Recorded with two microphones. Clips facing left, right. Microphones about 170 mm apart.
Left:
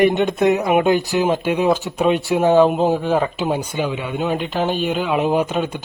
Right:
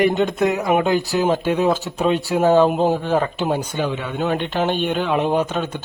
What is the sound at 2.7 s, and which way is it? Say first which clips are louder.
Speech: left 1 dB; centre (ahead or behind).